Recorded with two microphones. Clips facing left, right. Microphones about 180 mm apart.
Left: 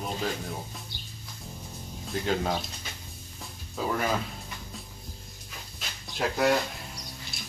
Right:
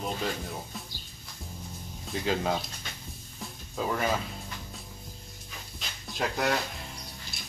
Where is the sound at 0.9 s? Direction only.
70° left (ahead or behind).